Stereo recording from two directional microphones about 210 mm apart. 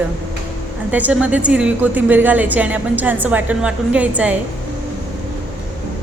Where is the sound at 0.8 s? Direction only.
5° right (ahead or behind).